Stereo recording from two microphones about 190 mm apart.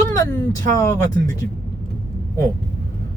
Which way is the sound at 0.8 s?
20° left (ahead or behind).